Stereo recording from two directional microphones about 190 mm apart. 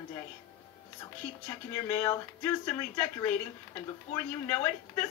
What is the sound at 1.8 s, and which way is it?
Speech, 15° left (ahead or behind).